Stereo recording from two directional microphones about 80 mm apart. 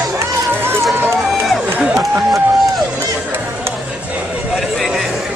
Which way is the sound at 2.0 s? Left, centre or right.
Centre.